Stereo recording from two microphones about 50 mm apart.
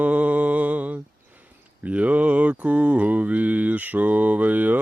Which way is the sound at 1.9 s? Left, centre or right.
Right.